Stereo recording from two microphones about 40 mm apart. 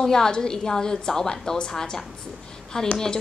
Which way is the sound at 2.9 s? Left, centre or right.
Centre.